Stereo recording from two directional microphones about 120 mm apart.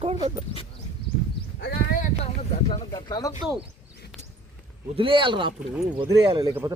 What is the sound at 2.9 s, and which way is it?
Speech, 35° left (ahead or behind).